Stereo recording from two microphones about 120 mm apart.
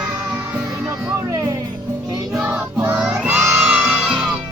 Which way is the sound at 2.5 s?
15° right (ahead or behind).